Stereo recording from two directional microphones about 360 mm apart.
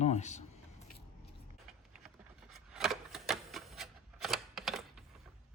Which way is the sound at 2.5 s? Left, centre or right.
Centre.